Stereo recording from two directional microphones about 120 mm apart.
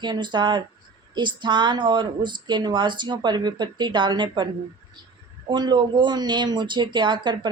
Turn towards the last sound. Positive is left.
turn(degrees=-40)  # may be behind; listen again after turning